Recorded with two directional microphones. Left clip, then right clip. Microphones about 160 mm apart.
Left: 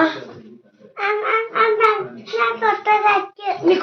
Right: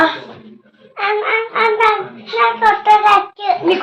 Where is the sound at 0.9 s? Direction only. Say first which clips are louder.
Right 3 dB; 20° left (ahead or behind).